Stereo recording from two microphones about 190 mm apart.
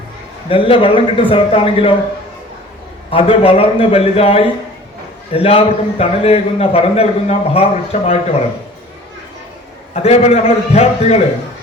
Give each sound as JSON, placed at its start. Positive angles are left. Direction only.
{"t": 0.4, "sound": "a man's voice", "side_deg": 30}
{"t": 3.1, "sound": "a man's voice", "side_deg": 30}
{"t": 9.9, "sound": "a man's voice", "side_deg": 35}